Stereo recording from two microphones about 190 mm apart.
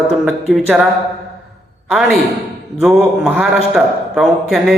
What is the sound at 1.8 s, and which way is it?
Speech, centre (ahead or behind).